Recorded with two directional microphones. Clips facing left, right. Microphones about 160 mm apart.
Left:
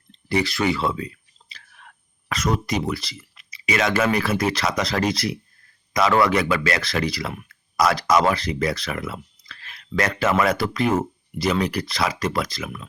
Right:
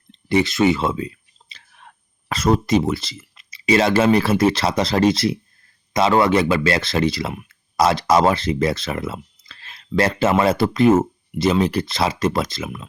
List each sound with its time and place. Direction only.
0.1 s speech: 20° right (ahead or behind)